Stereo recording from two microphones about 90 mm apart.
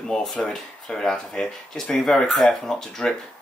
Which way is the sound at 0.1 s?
5° left (ahead or behind).